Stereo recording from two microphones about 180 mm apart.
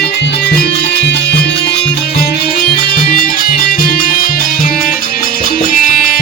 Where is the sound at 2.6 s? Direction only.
55° left (ahead or behind).